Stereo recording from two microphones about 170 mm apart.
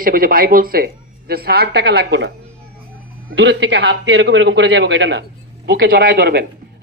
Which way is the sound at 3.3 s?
90° right.